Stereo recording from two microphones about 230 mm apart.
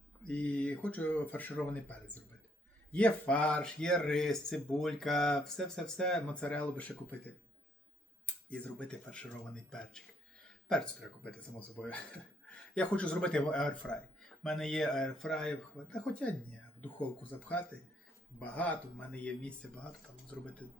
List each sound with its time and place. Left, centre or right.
0.3 s speech: centre
8.3 s speech: centre
12.5 s speech: centre
17.3 s speech: centre